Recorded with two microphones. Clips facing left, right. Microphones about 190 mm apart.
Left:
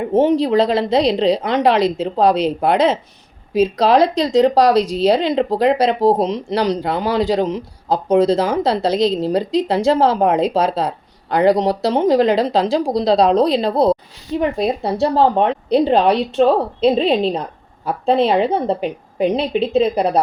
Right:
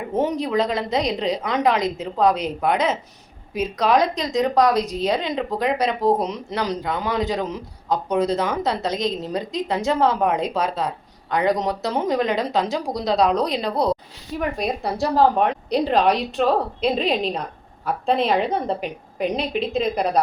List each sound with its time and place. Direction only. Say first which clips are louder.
0.1 s a woman's voice: left 7 dB; 25° left (ahead or behind)